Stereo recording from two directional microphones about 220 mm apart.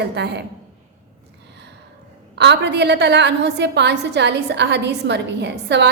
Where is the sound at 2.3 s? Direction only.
50° right (ahead or behind).